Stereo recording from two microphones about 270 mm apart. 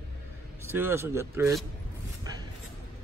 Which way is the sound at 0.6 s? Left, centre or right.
Centre.